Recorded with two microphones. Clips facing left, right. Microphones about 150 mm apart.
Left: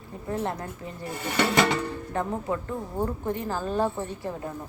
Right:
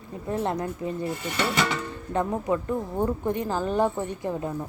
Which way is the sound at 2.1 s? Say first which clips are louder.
Right 4 dB; 15° right (ahead or behind).